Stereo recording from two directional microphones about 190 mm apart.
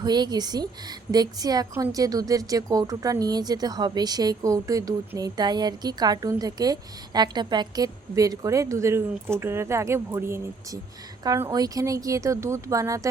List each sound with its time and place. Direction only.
0.0 s a woman's voice: 20° right (ahead or behind)